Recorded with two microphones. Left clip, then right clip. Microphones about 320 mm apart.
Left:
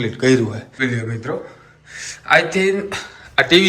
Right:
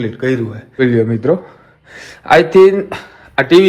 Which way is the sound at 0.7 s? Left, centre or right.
Centre.